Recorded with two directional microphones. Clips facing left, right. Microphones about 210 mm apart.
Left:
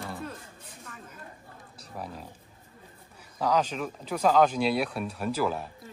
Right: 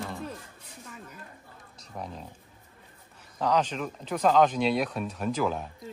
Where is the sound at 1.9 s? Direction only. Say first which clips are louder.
Even; 5° left (ahead or behind).